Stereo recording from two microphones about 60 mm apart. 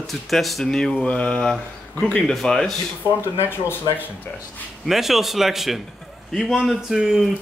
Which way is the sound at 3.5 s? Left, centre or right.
Left.